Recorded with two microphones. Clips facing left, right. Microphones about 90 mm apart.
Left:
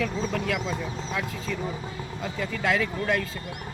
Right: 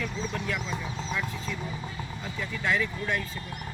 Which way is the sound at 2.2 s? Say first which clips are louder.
Left 6 dB; 90° left.